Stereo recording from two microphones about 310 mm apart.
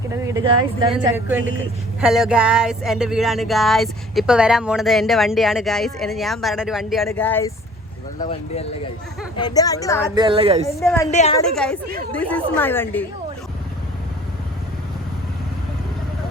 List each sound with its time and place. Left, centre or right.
0.3 s a woman's voice: centre
0.9 s a sound: centre
8.2 s a woman's voice: centre
10.2 s a woman's voice: centre
10.7 s a woman's voice: centre
11.1 s a woman's voice: left
11.3 s a sound: centre